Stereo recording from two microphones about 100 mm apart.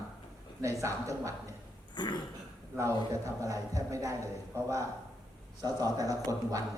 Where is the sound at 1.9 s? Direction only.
45° left (ahead or behind).